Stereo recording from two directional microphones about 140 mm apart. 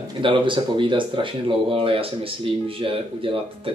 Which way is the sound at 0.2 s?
35° right (ahead or behind).